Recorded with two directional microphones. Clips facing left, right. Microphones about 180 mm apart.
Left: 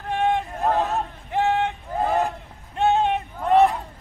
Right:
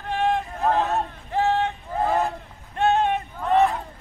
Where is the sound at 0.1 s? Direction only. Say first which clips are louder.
Left 1 dB; 20° left (ahead or behind).